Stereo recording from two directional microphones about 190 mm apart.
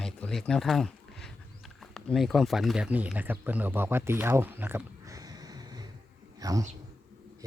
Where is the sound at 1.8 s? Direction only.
Centre (ahead or behind).